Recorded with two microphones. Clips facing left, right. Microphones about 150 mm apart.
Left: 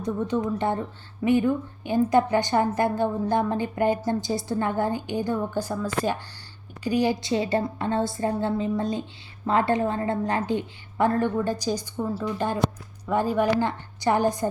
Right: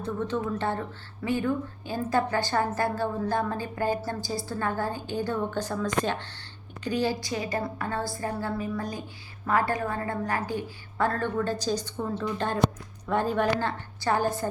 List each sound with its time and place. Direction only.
0.0 s a woman's voice: 15° left (ahead or behind)